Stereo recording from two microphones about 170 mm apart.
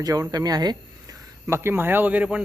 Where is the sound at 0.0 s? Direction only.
20° right (ahead or behind).